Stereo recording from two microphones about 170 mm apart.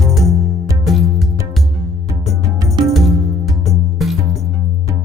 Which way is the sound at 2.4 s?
20° right (ahead or behind).